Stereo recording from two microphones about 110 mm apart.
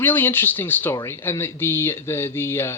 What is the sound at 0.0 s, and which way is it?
Speech, 20° left (ahead or behind).